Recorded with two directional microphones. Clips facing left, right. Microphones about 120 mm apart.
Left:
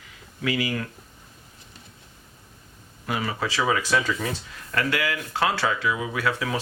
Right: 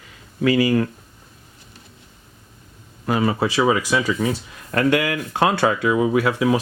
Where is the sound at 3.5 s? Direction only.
15° right (ahead or behind).